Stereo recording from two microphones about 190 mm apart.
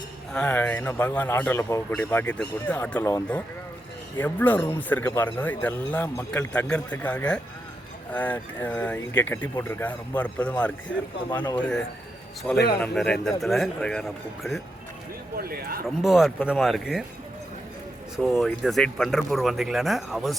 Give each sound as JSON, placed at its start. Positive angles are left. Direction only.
{"t": 0.3, "sound": "speech", "side_deg": 5}
{"t": 11.3, "sound": "speech", "side_deg": 20}
{"t": 11.5, "sound": "speech", "side_deg": 5}
{"t": 15.4, "sound": "speech", "side_deg": -50}
{"t": 16.0, "sound": "speech", "side_deg": 0}
{"t": 18.2, "sound": "speech", "side_deg": 0}